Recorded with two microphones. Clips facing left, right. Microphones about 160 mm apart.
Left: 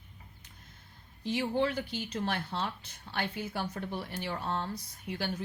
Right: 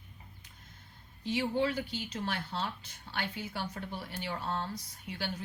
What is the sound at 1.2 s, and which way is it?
Speech, 50° left (ahead or behind).